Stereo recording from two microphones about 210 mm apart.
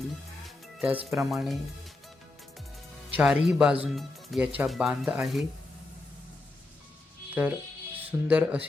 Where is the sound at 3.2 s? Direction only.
Centre (ahead or behind).